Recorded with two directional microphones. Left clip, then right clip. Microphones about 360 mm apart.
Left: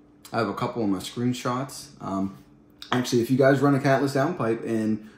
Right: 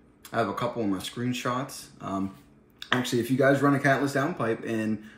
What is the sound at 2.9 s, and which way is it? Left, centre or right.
Speech, centre.